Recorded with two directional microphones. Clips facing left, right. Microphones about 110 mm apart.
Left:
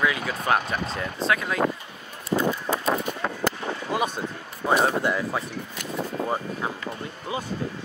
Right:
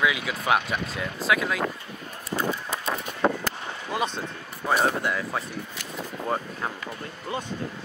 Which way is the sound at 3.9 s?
15° left (ahead or behind).